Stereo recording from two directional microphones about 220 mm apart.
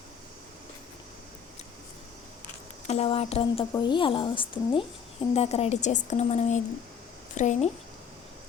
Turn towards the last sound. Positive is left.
turn(degrees=35)  # may be behind; listen again after turning